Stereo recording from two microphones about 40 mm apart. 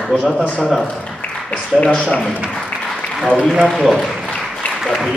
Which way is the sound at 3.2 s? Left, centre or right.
Centre.